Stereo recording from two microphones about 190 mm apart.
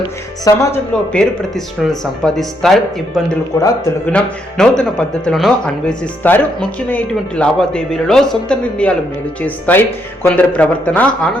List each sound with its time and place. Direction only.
0.4 s a man's voice: 15° left (ahead or behind)
4.0 s a man's voice: 5° left (ahead or behind)